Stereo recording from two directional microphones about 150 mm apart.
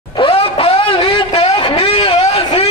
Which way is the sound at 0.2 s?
40° left (ahead or behind).